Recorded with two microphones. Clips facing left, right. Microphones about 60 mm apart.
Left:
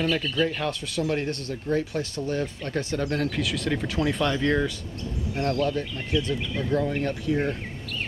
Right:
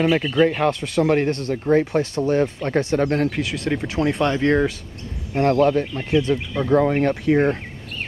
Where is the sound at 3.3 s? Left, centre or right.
Centre.